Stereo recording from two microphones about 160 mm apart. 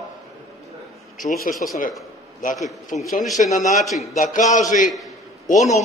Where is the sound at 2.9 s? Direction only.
50° left (ahead or behind).